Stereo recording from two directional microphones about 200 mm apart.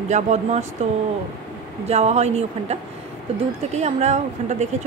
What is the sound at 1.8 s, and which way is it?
Speech, 30° right (ahead or behind).